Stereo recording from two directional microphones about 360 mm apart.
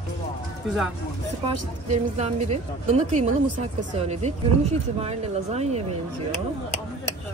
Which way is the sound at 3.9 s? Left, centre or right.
Centre.